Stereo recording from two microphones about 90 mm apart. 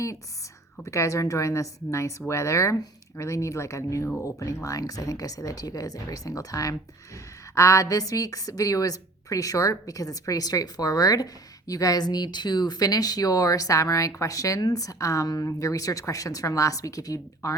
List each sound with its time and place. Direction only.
0.9 s a woman's voice: 35° left (ahead or behind)